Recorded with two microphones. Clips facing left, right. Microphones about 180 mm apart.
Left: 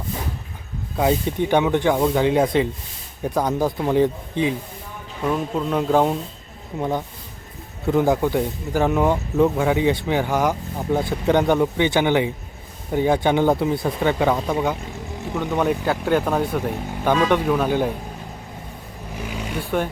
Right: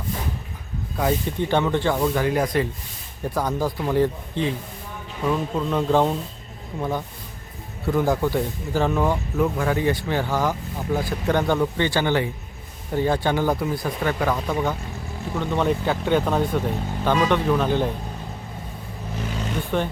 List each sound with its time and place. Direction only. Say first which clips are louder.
0.9 s speech: left 3 dB; 15° left (ahead or behind)
19.1 s vehicle: even; 10° left (ahead or behind)